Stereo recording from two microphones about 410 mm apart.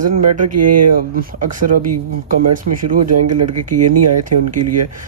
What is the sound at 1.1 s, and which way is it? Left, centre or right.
Speech, right.